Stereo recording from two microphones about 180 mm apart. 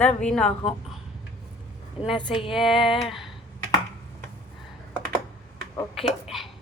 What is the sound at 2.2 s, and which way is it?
Speech, 25° left (ahead or behind).